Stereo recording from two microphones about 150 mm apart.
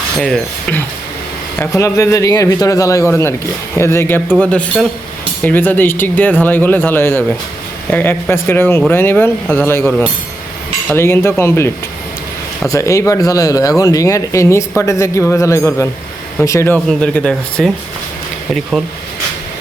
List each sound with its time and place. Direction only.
0.2 s speech: 5° left (ahead or behind)
1.5 s speech: 20° left (ahead or behind)